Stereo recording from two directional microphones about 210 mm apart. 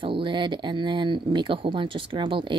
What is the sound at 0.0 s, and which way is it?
Speech, 25° right (ahead or behind).